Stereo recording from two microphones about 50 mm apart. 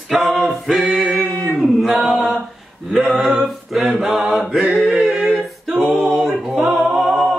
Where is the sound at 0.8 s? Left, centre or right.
Right.